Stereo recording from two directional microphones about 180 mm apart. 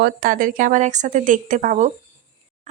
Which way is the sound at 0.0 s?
50° right (ahead or behind).